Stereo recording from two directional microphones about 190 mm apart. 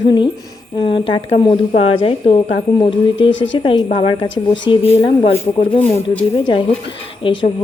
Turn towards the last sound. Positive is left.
turn(degrees=25)  # may be behind; listen again after turning